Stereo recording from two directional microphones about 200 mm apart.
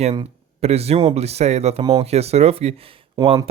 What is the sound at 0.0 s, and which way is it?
Speech, 30° right (ahead or behind).